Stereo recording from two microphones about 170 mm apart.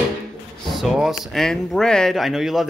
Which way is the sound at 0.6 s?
Centre (ahead or behind).